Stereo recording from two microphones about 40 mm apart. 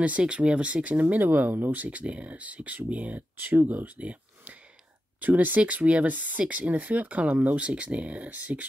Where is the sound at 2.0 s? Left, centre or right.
Right.